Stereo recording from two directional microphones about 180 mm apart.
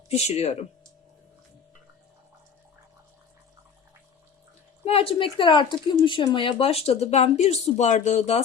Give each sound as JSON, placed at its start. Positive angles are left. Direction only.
{"t": 0.1, "sound": "speech", "side_deg": 35}
{"t": 4.9, "sound": "speech", "side_deg": 30}